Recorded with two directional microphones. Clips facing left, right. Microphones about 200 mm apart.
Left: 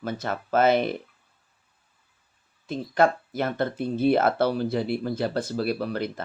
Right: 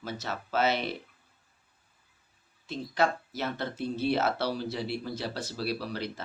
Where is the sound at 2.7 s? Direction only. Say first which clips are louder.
Left 6 dB; 50° left (ahead or behind).